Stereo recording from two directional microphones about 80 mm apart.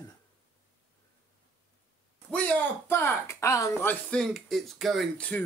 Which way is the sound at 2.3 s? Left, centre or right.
Centre.